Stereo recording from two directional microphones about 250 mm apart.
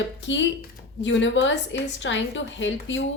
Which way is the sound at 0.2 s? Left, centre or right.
Left.